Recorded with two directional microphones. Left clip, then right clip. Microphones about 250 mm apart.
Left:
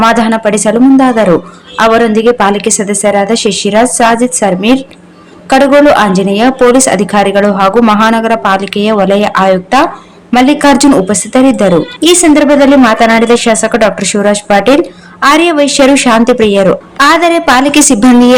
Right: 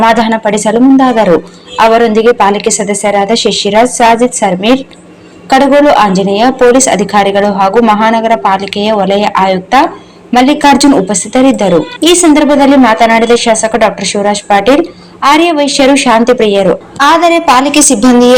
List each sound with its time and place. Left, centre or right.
0.1 s a woman's voice: centre